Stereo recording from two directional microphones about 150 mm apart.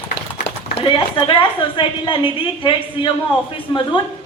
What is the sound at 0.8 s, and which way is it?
A woman's voice, 35° left (ahead or behind).